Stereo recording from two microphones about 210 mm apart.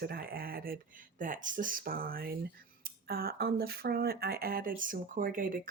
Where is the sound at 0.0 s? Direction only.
45° right (ahead or behind).